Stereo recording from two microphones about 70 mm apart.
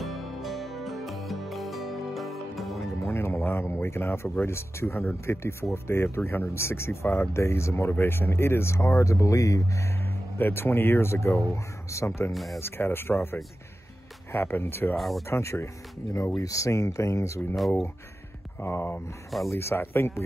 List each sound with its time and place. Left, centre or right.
0.0 s music: centre
3.0 s speech: left
10.3 s speech: left
12.3 s speech: centre
12.5 s speech: left
15.0 s speech: centre
15.2 s speech: left
17.6 s speech: centre
18.6 s speech: left